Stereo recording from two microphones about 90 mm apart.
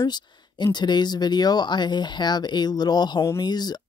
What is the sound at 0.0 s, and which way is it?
Speech, 50° left (ahead or behind).